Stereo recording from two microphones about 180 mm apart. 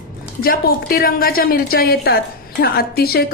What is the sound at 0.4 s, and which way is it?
A woman's voice, 55° left (ahead or behind).